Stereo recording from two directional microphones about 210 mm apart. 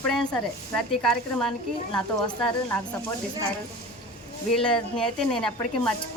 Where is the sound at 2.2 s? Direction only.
20° left (ahead or behind).